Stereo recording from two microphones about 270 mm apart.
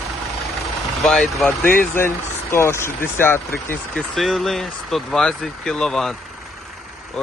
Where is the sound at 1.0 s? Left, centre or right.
Centre.